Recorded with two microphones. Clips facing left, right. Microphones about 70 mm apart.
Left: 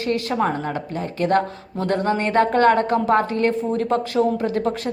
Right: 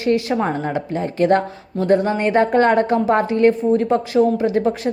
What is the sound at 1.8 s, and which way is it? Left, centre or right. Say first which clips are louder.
Speech: right 4 dB; centre.